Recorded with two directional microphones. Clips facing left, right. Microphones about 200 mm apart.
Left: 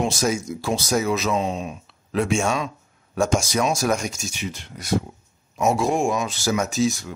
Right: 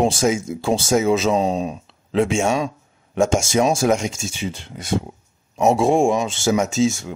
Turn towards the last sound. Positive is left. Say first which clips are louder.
# right 3 dB
turn(degrees=-25)  # may be behind; listen again after turning